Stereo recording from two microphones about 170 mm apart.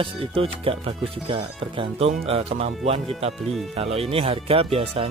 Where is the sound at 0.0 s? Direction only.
30° right (ahead or behind).